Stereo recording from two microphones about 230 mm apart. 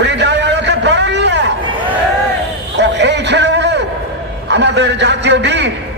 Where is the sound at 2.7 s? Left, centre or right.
Right.